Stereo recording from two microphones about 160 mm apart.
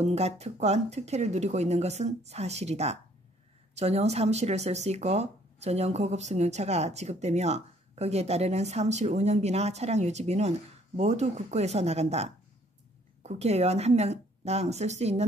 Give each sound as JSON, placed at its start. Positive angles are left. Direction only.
{"t": 0.0, "sound": "speech", "side_deg": -40}